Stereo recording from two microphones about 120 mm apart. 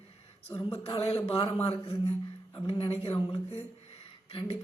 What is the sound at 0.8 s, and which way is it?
Speech, 55° left (ahead or behind).